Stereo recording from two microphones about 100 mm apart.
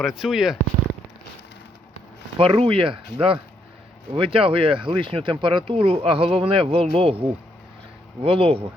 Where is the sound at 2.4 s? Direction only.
65° right (ahead or behind).